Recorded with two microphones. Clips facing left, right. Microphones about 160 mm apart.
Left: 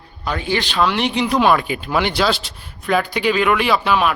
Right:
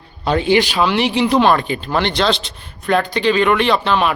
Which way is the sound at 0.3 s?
25° right (ahead or behind).